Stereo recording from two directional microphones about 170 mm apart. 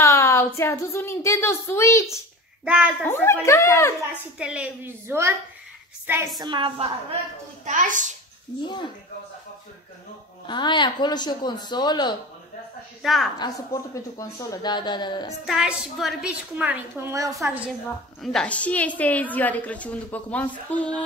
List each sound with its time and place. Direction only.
0.0 s a woman's voice: 15° left (ahead or behind)
2.6 s a woman's voice: 5° right (ahead or behind)
3.0 s a woman's voice: 15° left (ahead or behind)
4.4 s a woman's voice: 5° right (ahead or behind); by 7.2 s 30° right (ahead or behind)
7.6 s a child's voice: 50° right (ahead or behind)
8.6 s speech: 25° left (ahead or behind)
10.4 s speech: 25° left (ahead or behind)
13.0 s a woman's voice: centre (ahead or behind)
14.1 s speech: 20° left (ahead or behind)
15.4 s a woman's voice: centre (ahead or behind); by 17.5 s 20° right (ahead or behind)
18.2 s a woman's voice: 5° left (ahead or behind)